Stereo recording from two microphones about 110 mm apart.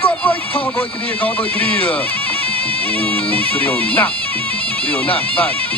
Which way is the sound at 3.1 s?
15° left (ahead or behind).